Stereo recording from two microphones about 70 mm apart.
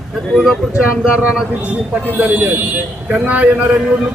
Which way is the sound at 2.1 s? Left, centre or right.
Right.